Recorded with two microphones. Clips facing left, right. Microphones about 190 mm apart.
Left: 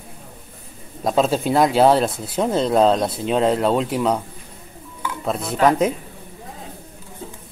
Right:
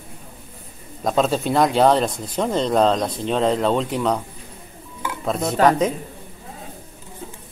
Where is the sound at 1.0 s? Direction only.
Centre (ahead or behind).